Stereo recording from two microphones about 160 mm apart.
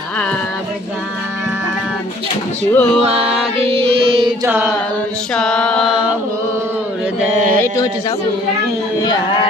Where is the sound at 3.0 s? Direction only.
40° right (ahead or behind).